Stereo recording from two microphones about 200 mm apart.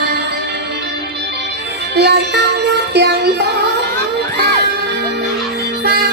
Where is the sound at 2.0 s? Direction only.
55° right (ahead or behind).